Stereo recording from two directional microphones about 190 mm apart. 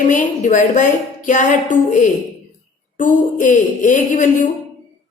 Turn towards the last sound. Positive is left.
turn(degrees=40)  # may be behind; listen again after turning